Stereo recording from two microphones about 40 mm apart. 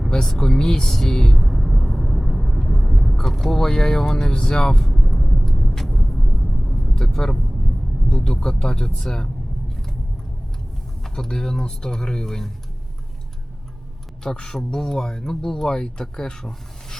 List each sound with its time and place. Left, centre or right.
0.3 s speech: centre
1.5 s vehicle: centre
3.2 s speech: centre
4.9 s vehicle: centre
6.9 s vehicle: centre
8.1 s speech: centre
9.0 s vehicle: centre
11.0 s speech: centre
14.3 s speech: centre